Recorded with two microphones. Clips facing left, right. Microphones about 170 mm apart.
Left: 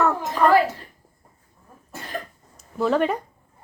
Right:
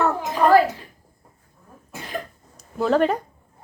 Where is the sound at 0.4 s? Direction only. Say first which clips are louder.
Right 1 dB; 30° right (ahead or behind).